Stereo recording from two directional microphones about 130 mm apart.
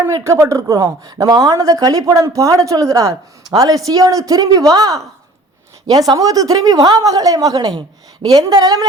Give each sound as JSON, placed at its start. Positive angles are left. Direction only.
{"t": 0.0, "sound": "speech", "side_deg": -25}